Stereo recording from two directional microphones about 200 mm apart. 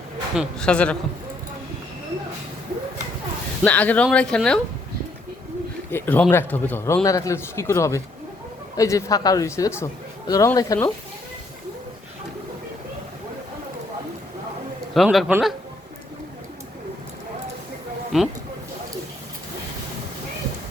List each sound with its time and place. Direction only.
0.3 s speech: 5° left (ahead or behind)
3.6 s speech: 5° left (ahead or behind)
5.9 s a man's voice: 10° left (ahead or behind)
14.9 s speech: centre (ahead or behind)
18.1 s speech: centre (ahead or behind)